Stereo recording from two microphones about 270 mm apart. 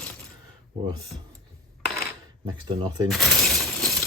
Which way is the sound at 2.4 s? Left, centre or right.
Centre.